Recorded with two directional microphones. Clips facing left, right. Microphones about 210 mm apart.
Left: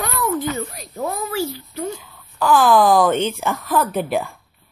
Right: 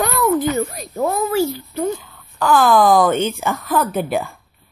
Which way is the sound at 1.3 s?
45° right (ahead or behind).